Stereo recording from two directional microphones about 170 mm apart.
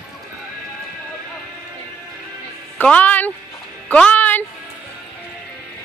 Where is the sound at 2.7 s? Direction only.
10° left (ahead or behind).